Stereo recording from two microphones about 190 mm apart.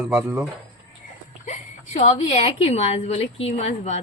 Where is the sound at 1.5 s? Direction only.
35° left (ahead or behind).